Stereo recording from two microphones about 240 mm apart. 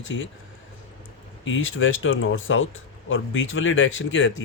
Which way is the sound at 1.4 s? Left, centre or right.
Left.